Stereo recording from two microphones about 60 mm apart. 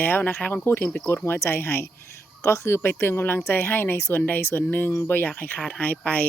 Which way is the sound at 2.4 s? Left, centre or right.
Left.